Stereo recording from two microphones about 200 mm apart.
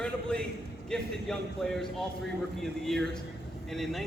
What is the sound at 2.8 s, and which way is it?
A man's voice, centre (ahead or behind).